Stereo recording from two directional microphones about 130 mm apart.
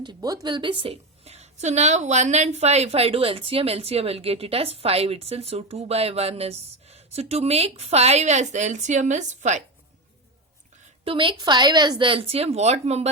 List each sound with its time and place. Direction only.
0.0 s a woman's voice: 30° right (ahead or behind); by 9.6 s 65° right (ahead or behind)
11.0 s a woman's voice: 40° right (ahead or behind)